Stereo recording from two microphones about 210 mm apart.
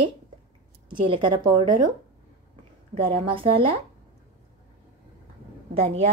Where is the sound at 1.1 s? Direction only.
20° right (ahead or behind).